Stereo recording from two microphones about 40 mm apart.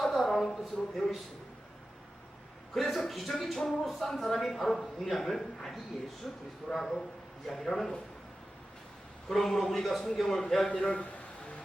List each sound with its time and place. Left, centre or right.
0.0 s a sound: centre
0.5 s a man's voice: centre
2.7 s a man's voice: centre
9.3 s a man's voice: centre
10.8 s a man's voice: left